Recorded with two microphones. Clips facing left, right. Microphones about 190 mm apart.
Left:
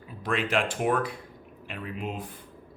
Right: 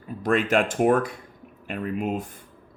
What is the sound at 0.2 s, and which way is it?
Speech, 45° right (ahead or behind).